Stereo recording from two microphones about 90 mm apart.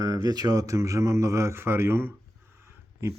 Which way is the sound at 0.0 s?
45° right (ahead or behind).